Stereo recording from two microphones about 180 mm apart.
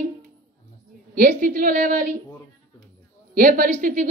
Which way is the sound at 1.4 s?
50° right (ahead or behind).